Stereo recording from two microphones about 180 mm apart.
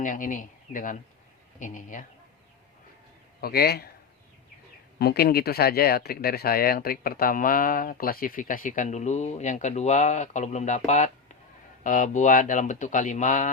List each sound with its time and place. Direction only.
0.0 s speech: 45° left (ahead or behind)
3.4 s a man's voice: 60° left (ahead or behind)
4.9 s speech: 60° left (ahead or behind); by 13.5 s 45° left (ahead or behind)